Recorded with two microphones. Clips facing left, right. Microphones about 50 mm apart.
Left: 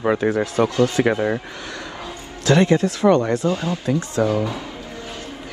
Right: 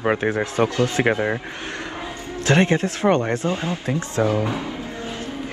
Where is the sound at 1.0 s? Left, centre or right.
Right.